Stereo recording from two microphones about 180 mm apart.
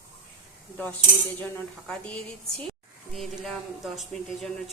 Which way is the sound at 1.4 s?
5° left (ahead or behind).